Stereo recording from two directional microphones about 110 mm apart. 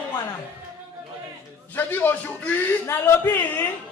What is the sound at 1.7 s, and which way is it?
A man's voice, 15° left (ahead or behind).